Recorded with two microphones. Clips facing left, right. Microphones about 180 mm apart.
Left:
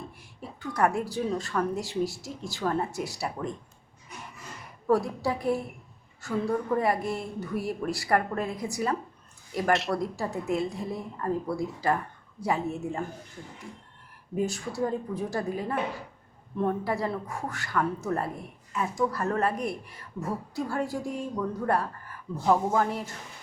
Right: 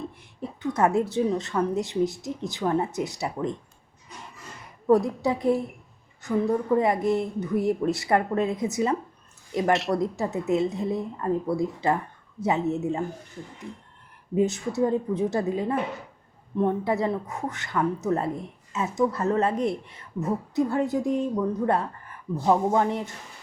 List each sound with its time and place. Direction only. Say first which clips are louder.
0.2 s a woman's voice: right 7 dB; 20° right (ahead or behind)
5.0 s a woman's voice: right 4 dB; 20° right (ahead or behind)
14.3 s a woman's voice: right 6 dB; 20° right (ahead or behind)